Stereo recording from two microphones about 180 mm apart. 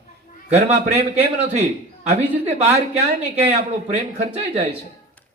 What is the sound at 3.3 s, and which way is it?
A man's voice, 35° right (ahead or behind).